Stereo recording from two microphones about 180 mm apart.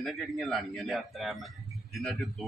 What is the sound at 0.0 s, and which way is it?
A man's voice, centre (ahead or behind).